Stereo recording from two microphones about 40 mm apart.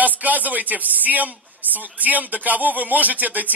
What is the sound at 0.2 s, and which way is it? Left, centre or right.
A man's voice, right.